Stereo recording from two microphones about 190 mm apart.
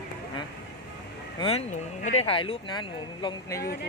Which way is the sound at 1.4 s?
30° left (ahead or behind).